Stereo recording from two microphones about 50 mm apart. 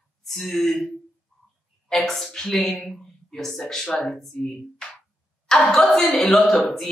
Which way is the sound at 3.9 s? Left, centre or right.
Centre.